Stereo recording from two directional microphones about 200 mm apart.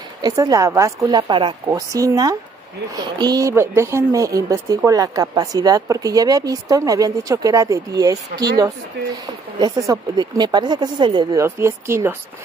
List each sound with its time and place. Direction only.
0.2 s a woman's voice: 15° right (ahead or behind)
9.6 s speech: 20° right (ahead or behind)